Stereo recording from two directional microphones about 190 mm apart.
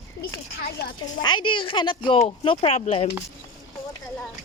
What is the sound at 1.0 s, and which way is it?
Speech, 20° left (ahead or behind).